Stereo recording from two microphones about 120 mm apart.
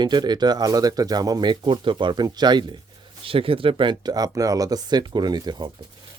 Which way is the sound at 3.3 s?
50° right (ahead or behind).